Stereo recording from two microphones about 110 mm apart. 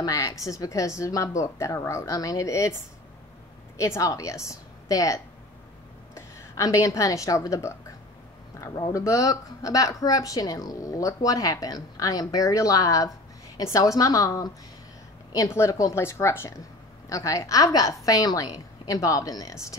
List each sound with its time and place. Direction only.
0.0 s a woman's voice: 35° left (ahead or behind)